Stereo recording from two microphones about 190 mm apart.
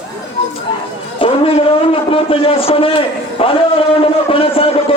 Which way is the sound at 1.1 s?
30° left (ahead or behind).